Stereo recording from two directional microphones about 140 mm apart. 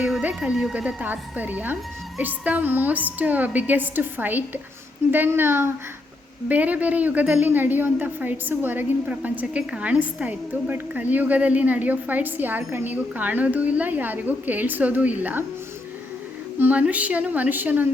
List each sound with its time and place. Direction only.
0.0 s a woman's voice: 10° right (ahead or behind)
16.6 s a woman's voice: 10° right (ahead or behind)